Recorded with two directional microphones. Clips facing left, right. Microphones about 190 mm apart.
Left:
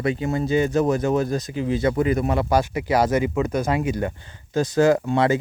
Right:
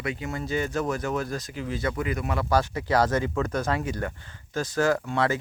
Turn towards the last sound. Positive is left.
turn(degrees=20)  # may be behind; listen again after turning